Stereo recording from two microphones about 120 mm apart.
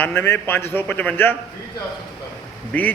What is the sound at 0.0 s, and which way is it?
A man's voice, 20° left (ahead or behind).